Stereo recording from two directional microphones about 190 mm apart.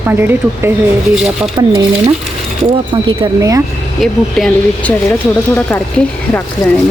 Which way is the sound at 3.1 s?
20° right (ahead or behind).